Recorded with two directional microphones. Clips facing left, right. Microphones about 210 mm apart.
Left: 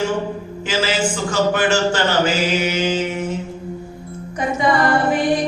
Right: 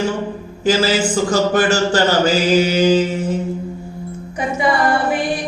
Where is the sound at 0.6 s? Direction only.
40° right (ahead or behind).